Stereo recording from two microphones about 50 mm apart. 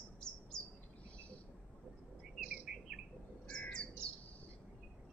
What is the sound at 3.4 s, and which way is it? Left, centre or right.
Bird, centre.